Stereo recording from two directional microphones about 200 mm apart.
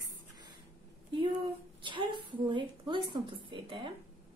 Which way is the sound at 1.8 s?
25° right (ahead or behind).